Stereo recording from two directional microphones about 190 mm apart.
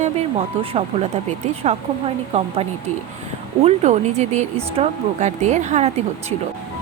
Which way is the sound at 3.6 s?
35° right (ahead or behind).